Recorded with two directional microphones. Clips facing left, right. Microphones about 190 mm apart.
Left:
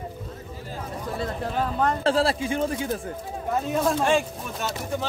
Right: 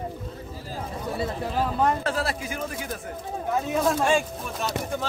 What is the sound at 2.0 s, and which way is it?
Speech, 30° left (ahead or behind).